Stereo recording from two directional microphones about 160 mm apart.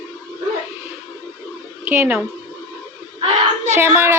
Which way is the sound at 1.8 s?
10° right (ahead or behind).